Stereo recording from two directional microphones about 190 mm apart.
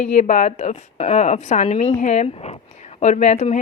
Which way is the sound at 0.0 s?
40° left (ahead or behind).